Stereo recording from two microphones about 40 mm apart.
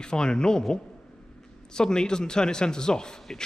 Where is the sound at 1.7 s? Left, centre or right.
Centre.